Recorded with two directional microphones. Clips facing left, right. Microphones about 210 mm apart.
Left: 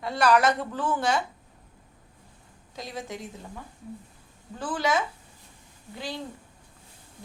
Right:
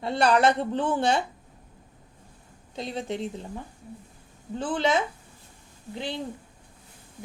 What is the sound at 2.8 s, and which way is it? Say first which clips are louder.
A woman's voice: right 5 dB; 25° right (ahead or behind).